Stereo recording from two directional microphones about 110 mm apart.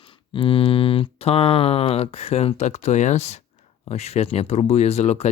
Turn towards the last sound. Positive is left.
turn(degrees=85)